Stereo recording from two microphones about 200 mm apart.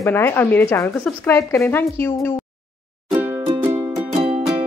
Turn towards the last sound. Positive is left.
turn(degrees=-30)  # may be behind; listen again after turning